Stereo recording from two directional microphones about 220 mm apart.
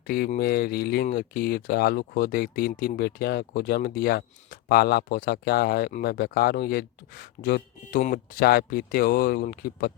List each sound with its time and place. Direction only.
0.1 s speech: 45° left (ahead or behind)